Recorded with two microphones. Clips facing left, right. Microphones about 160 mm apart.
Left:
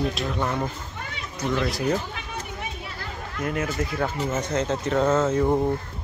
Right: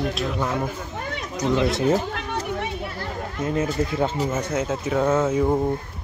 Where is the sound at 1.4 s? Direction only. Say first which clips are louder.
Right 4 dB; 20° right (ahead or behind).